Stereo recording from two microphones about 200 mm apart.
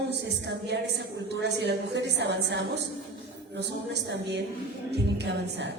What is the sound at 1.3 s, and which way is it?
A woman's voice, 60° right (ahead or behind).